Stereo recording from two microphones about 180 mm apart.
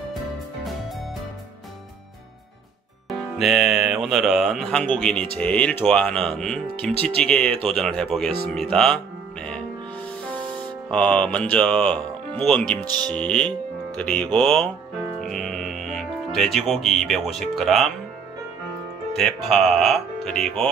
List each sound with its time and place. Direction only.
3.1 s speech: centre (ahead or behind)
10.9 s speech: 5° left (ahead or behind)
19.1 s speech: centre (ahead or behind)